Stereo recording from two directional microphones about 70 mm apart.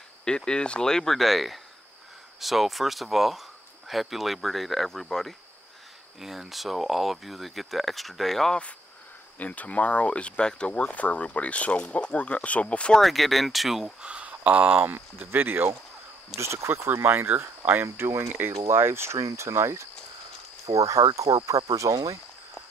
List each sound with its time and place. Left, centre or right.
0.2 s speech: centre
13.0 s speech: centre
14.0 s speech: centre
16.3 s speech: right